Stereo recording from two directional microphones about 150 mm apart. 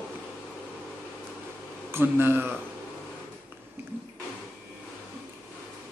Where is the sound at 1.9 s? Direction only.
15° right (ahead or behind).